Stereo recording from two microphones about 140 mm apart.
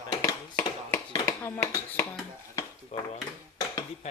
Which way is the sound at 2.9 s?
50° left (ahead or behind).